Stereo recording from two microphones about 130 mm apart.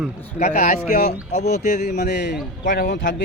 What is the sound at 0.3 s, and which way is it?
Speech, 70° left (ahead or behind).